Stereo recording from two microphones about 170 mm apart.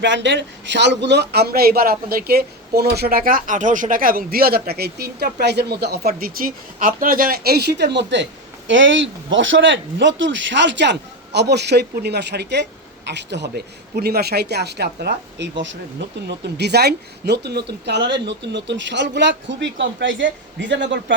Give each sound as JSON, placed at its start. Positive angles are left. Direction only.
{"t": 0.0, "sound": "a man's voice", "side_deg": -90}
{"t": 16.2, "sound": "speech", "side_deg": -80}